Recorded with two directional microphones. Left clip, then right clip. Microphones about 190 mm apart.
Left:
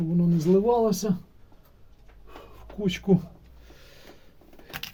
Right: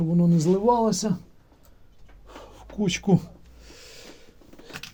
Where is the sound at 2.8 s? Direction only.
45° right (ahead or behind).